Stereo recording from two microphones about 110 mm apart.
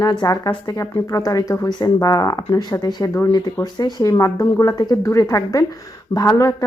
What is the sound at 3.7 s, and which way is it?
Speech, 40° left (ahead or behind).